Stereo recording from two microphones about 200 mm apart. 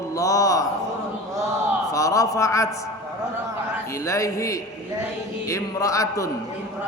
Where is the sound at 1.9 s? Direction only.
15° left (ahead or behind).